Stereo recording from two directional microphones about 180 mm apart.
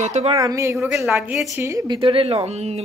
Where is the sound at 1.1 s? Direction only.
5° right (ahead or behind).